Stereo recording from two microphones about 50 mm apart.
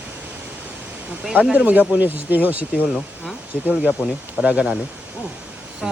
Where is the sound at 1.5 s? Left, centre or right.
Right.